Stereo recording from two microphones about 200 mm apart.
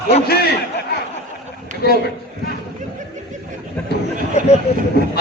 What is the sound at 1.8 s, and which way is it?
Speech, 50° left (ahead or behind).